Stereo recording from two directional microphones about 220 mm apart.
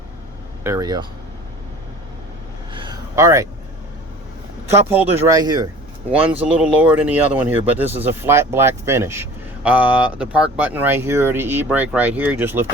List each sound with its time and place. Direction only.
0.6 s speech: 15° right (ahead or behind)
2.7 s a sound: 15° right (ahead or behind)
4.7 s speech: 10° right (ahead or behind)
6.1 s speech: 5° right (ahead or behind)